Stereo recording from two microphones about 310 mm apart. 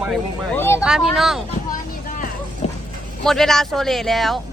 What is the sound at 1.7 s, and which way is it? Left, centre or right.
Vehicle, left.